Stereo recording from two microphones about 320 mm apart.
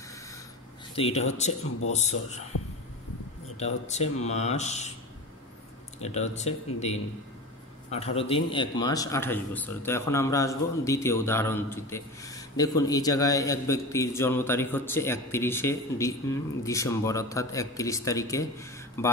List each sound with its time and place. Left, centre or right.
0.9 s speech: centre
3.5 s speech: left
6.0 s a man's voice: left